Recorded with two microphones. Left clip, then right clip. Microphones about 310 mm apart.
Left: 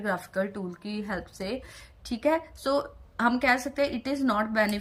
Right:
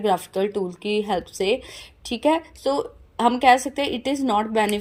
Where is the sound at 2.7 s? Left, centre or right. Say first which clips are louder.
Right 3 dB; centre.